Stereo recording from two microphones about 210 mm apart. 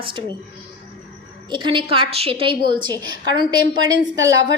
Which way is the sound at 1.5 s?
25° right (ahead or behind).